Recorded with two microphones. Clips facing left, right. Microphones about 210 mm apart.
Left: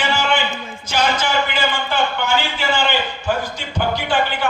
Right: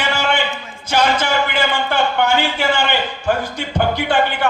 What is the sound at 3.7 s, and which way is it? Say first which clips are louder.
Music: right 3 dB; 55° right (ahead or behind).